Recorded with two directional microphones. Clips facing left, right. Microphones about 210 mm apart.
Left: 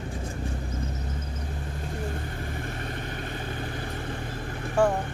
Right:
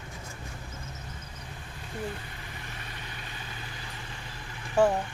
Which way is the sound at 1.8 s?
45° left (ahead or behind).